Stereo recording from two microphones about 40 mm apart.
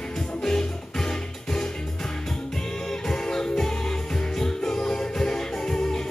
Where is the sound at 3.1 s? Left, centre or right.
Centre.